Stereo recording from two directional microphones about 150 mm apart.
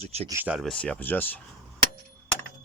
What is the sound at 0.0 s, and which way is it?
Speech, 45° right (ahead or behind).